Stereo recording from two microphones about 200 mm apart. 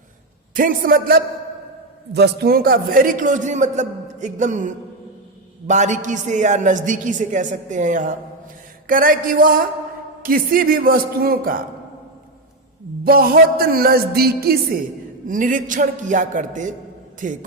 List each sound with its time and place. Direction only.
0.5 s music: 45° right (ahead or behind)
2.1 s a man's voice: 55° right (ahead or behind)
8.9 s music: 45° right (ahead or behind)
13.1 s music: 45° right (ahead or behind)
15.3 s a man's voice: 40° right (ahead or behind)